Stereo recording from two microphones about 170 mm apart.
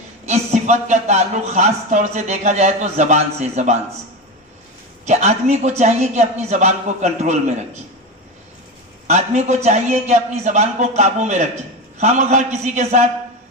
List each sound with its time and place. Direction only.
0.3 s speech: 40° right (ahead or behind)
5.0 s a man's voice: 40° right (ahead or behind)
9.0 s a man's voice: 40° right (ahead or behind)